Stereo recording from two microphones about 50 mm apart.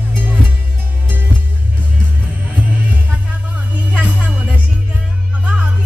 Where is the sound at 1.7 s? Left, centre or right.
Right.